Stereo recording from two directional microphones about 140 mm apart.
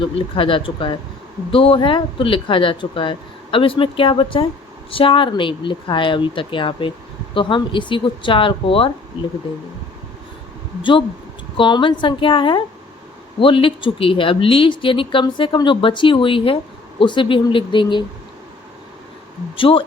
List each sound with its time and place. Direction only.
0.0 s speech: 40° left (ahead or behind)
11.5 s speech: 35° left (ahead or behind)
19.5 s speech: 40° left (ahead or behind)